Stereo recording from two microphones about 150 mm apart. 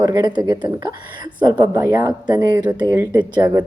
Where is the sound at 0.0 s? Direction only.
25° right (ahead or behind).